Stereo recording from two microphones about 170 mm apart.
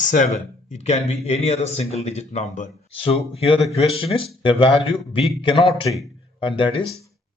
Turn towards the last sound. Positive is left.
turn(degrees=30)  # may be behind; listen again after turning